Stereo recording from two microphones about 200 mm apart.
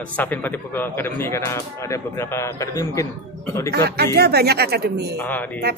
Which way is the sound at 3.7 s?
55° right (ahead or behind).